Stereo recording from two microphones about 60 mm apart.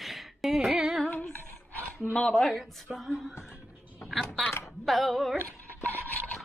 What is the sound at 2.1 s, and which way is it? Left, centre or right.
Speech, centre.